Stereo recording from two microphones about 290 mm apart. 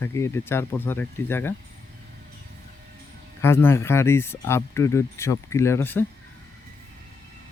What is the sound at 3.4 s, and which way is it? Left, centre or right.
Speech, centre.